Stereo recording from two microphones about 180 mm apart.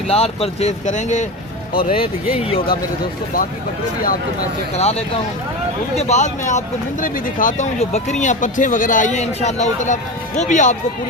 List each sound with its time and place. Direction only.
0.1 s speech: 35° left (ahead or behind)
1.7 s speech: 55° left (ahead or behind)
2.3 s speech: 30° left (ahead or behind)
4.8 s speech: 35° left (ahead or behind)